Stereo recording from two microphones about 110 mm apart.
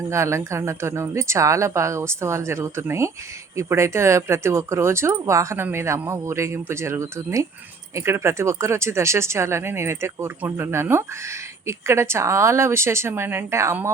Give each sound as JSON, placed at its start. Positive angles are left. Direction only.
{"t": 0.1, "sound": "speech", "side_deg": -25}